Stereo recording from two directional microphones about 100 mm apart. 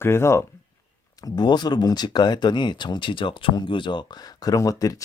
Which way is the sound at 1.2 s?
45° left (ahead or behind).